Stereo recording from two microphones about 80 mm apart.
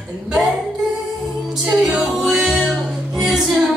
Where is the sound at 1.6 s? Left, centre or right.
Centre.